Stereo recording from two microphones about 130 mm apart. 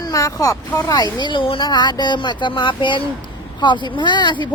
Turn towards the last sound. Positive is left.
turn(degrees=35)  # may be behind; listen again after turning